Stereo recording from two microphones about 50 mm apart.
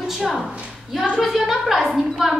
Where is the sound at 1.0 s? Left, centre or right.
Centre.